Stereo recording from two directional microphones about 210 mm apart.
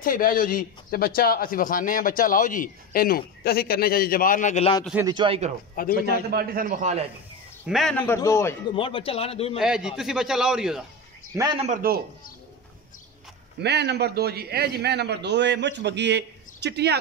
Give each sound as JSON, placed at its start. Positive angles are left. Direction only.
{"t": 0.0, "sound": "a man's voice", "side_deg": 40}
{"t": 5.0, "sound": "a man's voice", "side_deg": -20}
{"t": 5.8, "sound": "a man's voice", "side_deg": 45}
{"t": 6.3, "sound": "a man's voice", "side_deg": -45}
{"t": 7.6, "sound": "a man's voice", "side_deg": 0}
{"t": 8.7, "sound": "a man's voice", "side_deg": 25}
{"t": 9.6, "sound": "a man's voice", "side_deg": -5}
{"t": 11.3, "sound": "a man's voice", "side_deg": -20}
{"t": 11.7, "sound": "a man's voice", "side_deg": -45}
{"t": 13.6, "sound": "a man's voice", "side_deg": -55}